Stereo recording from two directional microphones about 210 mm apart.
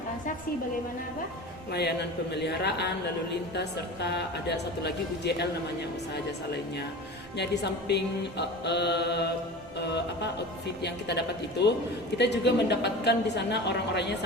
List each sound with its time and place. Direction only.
1.7 s music: 50° left (ahead or behind)
7.3 s music: 55° left (ahead or behind)
12.1 s a woman's voice: 55° left (ahead or behind)